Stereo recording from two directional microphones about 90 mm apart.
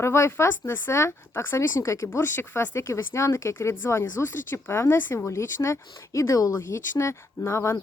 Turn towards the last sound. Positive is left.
turn(degrees=30)  # may be behind; listen again after turning